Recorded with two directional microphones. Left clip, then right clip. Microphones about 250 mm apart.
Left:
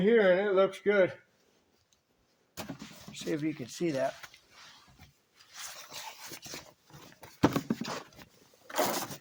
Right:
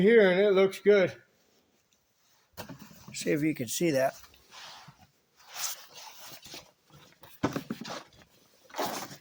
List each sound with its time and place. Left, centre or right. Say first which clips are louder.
0.0 s speech: right 3 dB; right
3.2 s speech: right 5 dB; right
7.4 s a sound: left 4 dB; left